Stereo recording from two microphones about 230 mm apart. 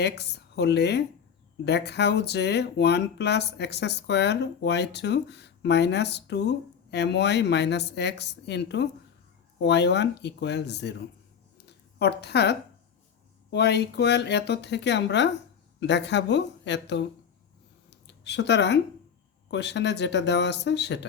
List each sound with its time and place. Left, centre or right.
0.0 s speech: left
11.5 s a sound: left
13.5 s speech: left
18.0 s speech: left